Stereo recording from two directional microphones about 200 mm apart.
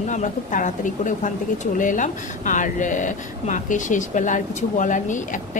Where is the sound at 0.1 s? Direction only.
40° left (ahead or behind).